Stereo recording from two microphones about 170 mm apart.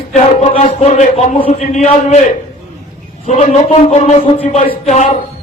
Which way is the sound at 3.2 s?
40° left (ahead or behind).